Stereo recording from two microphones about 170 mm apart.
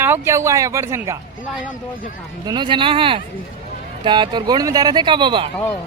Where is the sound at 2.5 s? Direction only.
30° right (ahead or behind).